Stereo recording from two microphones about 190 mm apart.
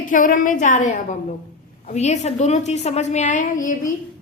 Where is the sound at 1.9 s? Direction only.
35° left (ahead or behind).